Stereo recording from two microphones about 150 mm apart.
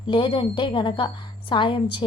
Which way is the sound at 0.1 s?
35° left (ahead or behind).